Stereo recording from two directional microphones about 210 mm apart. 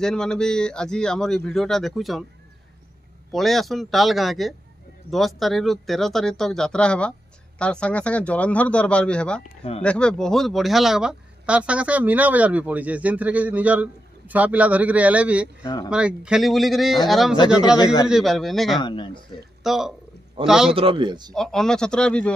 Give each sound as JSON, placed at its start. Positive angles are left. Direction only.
{"t": 0.0, "sound": "speech", "side_deg": 5}
{"t": 3.3, "sound": "a man's voice", "side_deg": 0}
{"t": 15.6, "sound": "speech", "side_deg": 20}
{"t": 15.9, "sound": "speech", "side_deg": -5}
{"t": 18.8, "sound": "a man's voice", "side_deg": 20}
{"t": 19.6, "sound": "speech", "side_deg": 0}
{"t": 20.7, "sound": "a man's voice", "side_deg": -25}
{"t": 21.4, "sound": "speech", "side_deg": 0}